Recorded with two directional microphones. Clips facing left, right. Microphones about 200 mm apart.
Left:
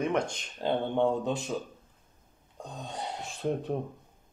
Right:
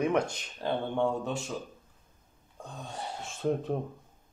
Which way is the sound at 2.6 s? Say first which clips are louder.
Left 2 dB; 20° left (ahead or behind).